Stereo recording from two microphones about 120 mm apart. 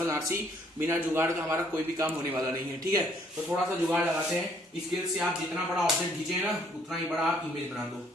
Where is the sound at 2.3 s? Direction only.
30° right (ahead or behind).